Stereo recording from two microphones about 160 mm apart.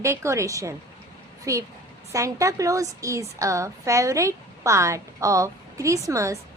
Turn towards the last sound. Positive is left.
turn(degrees=-20)  # may be behind; listen again after turning